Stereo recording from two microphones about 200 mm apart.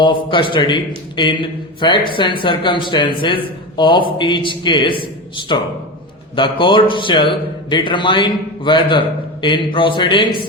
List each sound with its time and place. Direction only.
0.0 s a man's voice: 25° left (ahead or behind)
6.3 s a man's voice: 25° left (ahead or behind)